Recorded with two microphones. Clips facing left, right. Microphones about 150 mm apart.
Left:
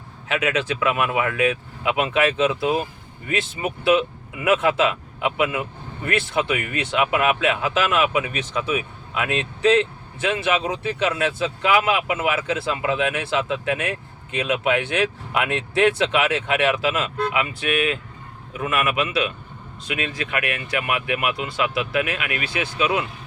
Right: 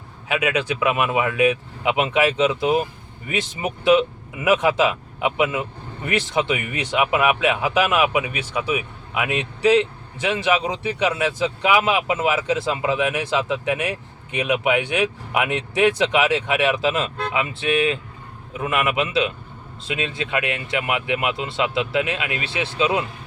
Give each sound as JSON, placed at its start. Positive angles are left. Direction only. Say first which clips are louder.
{"t": 0.3, "sound": "speech", "louder": "right 1 dB", "side_deg": -15}